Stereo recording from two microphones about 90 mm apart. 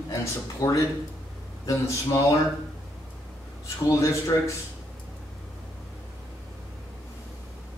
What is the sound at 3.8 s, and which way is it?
Speech, 35° left (ahead or behind).